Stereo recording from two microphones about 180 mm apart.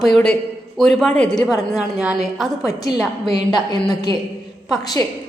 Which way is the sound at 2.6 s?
20° left (ahead or behind).